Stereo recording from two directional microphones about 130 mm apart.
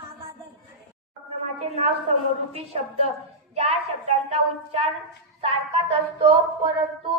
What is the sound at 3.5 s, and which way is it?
A woman's voice, 50° right (ahead or behind).